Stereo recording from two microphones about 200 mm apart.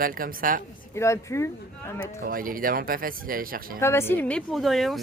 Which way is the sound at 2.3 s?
45° right (ahead or behind).